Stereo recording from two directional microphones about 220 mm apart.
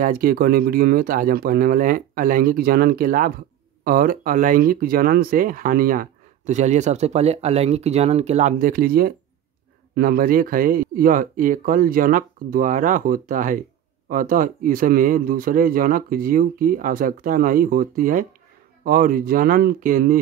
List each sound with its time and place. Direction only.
0.0 s speech: 40° right (ahead or behind)